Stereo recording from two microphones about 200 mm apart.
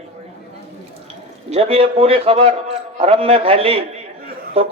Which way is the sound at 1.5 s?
30° right (ahead or behind).